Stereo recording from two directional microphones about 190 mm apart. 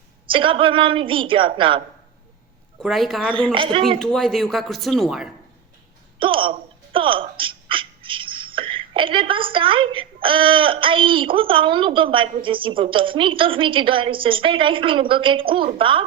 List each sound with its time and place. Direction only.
0.3 s a woman's voice: 25° right (ahead or behind)
2.8 s a woman's voice: centre (ahead or behind)
3.2 s a woman's voice: 25° right (ahead or behind)
3.9 s a woman's voice: 5° left (ahead or behind)
6.1 s speech: 25° right (ahead or behind)